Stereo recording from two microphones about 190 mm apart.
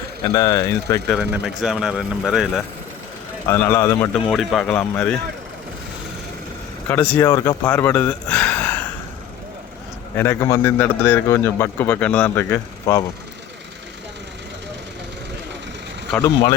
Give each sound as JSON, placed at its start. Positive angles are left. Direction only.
{"t": 0.3, "sound": "speech", "side_deg": 20}
{"t": 1.2, "sound": "speech", "side_deg": -5}
{"t": 3.4, "sound": "a man's voice", "side_deg": 15}
{"t": 4.3, "sound": "a man's voice", "side_deg": 0}
{"t": 6.8, "sound": "speech", "side_deg": 10}
{"t": 10.2, "sound": "a man's voice", "side_deg": 15}
{"t": 16.1, "sound": "speech", "side_deg": 20}